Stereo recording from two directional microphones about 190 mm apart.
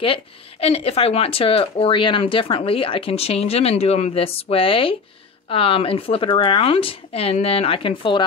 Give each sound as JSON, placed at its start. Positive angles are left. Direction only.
{"t": 0.0, "sound": "speech", "side_deg": 30}